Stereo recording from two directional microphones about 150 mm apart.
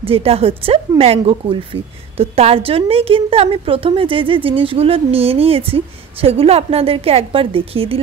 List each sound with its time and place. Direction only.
0.0 s speech: 40° right (ahead or behind)